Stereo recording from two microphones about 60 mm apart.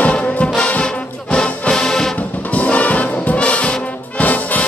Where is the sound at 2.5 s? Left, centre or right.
Left.